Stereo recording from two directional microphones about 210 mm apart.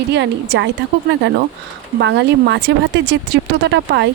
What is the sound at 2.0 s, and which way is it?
Speech, 55° right (ahead or behind).